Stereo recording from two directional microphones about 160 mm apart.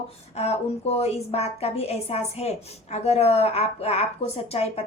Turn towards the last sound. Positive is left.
turn(degrees=40)  # may be behind; listen again after turning